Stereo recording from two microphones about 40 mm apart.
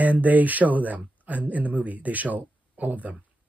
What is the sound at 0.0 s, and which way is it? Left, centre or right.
Speech, right.